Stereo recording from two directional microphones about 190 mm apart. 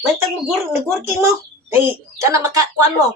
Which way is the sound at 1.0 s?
15° right (ahead or behind).